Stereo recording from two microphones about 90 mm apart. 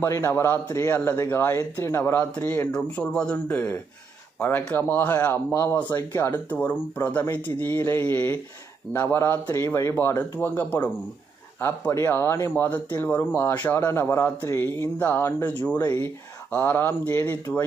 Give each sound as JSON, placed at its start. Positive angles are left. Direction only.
{"t": 0.0, "sound": "speech", "side_deg": 30}
{"t": 2.7, "sound": "speech", "side_deg": 10}
{"t": 6.5, "sound": "speech", "side_deg": 20}